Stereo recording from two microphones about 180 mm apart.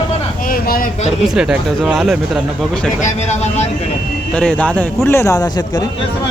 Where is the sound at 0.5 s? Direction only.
55° left (ahead or behind).